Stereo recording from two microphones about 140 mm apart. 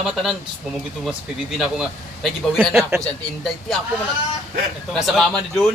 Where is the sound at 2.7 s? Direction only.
20° right (ahead or behind).